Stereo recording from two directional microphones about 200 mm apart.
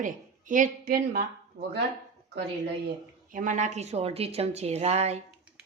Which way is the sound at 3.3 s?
40° right (ahead or behind).